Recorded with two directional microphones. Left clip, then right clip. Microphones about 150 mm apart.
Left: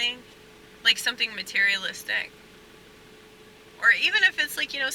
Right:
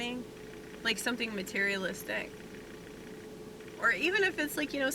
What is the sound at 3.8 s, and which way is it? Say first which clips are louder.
Speech: left 8 dB; 25° left (ahead or behind).